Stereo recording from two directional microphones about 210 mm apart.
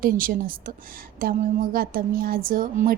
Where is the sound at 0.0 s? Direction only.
40° right (ahead or behind).